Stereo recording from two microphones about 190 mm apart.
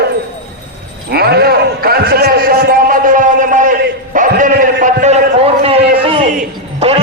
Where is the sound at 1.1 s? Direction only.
55° right (ahead or behind).